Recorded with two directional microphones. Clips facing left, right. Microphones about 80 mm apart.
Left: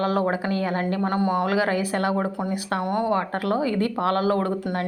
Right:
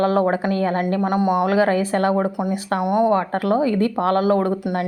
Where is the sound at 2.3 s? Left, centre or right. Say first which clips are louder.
Right 4 dB; centre.